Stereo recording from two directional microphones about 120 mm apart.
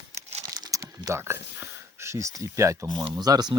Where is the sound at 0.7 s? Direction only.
30° right (ahead or behind).